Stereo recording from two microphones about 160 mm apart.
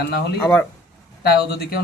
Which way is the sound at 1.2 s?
80° left.